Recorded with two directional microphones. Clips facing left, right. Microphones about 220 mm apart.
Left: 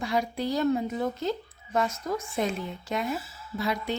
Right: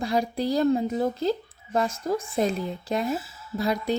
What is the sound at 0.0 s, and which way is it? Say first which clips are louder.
A woman's voice: right 3 dB; 35° right (ahead or behind).